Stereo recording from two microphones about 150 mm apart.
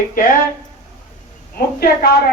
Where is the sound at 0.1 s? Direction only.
65° left (ahead or behind).